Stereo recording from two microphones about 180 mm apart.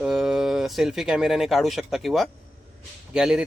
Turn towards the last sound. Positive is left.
turn(degrees=-5)  # may be behind; listen again after turning